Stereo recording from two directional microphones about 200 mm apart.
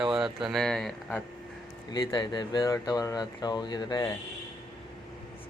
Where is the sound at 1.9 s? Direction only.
20° left (ahead or behind).